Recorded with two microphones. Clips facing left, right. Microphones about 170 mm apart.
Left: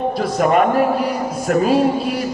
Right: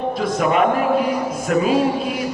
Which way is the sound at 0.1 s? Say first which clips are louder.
Left 2 dB; 45° left (ahead or behind).